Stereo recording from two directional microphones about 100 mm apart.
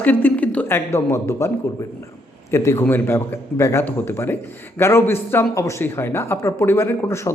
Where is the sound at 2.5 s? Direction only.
30° left (ahead or behind).